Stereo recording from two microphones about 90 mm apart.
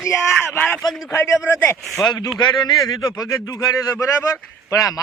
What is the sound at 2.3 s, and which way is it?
A man's voice, 55° left (ahead or behind).